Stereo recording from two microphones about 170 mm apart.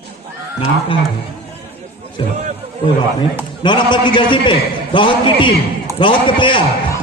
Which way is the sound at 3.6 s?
25° left (ahead or behind).